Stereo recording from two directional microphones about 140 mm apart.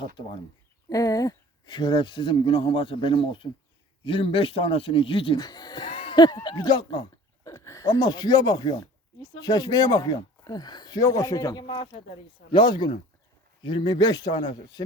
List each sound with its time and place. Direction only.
0.9 s speech: 25° left (ahead or behind)
5.4 s speech: 30° left (ahead or behind)
5.9 s a sound: 45° left (ahead or behind)
6.1 s speech: 30° left (ahead or behind)